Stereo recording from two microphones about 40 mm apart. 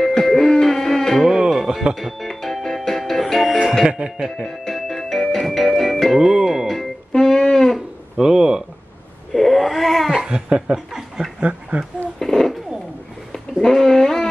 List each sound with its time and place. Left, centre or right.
0.0 s music: centre
1.5 s music: centre
2.1 s music: centre
3.8 s speech: centre
4.5 s music: centre
6.1 s music: centre
7.1 s music: centre
8.2 s a sound: centre
9.3 s cat: centre
10.1 s a sound: right
10.9 s chuckle: centre
11.3 s a sound: right
12.2 s a sound: centre